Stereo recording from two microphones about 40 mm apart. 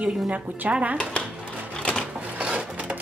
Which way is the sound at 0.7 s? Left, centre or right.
Right.